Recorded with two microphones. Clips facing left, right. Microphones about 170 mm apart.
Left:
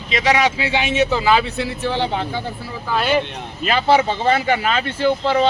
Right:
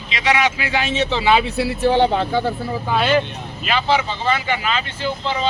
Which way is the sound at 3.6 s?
40° left (ahead or behind).